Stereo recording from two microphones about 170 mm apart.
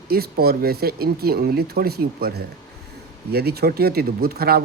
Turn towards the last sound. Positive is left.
turn(degrees=-65)  # may be behind; listen again after turning